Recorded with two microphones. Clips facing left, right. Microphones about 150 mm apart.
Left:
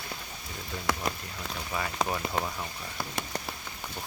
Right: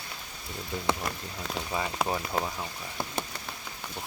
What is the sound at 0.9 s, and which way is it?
Speech, 25° right (ahead or behind).